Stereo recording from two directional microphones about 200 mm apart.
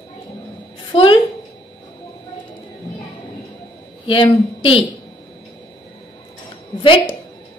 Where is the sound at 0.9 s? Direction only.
25° left (ahead or behind).